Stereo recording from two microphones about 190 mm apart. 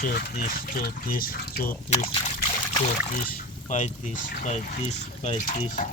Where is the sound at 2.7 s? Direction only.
40° left (ahead or behind).